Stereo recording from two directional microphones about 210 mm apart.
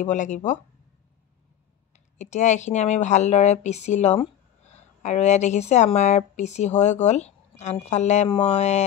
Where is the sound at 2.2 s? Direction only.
35° left (ahead or behind).